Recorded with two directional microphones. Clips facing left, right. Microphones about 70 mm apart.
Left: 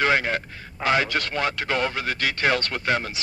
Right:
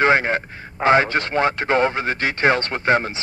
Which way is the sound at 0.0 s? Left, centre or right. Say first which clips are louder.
Right 5 dB; right.